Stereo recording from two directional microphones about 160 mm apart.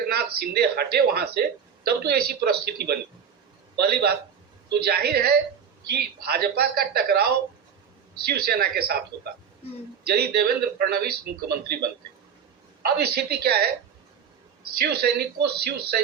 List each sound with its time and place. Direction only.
0.1 s a man's voice: 80° right
14.7 s a man's voice: 75° right (ahead or behind)